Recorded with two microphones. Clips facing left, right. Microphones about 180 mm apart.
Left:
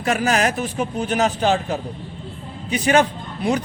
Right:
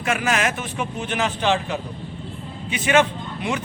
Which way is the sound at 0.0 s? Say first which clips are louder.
Left 3 dB; 40° left (ahead or behind).